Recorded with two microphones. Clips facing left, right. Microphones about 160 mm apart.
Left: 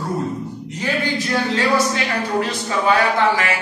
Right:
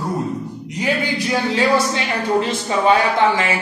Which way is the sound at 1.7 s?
25° right (ahead or behind).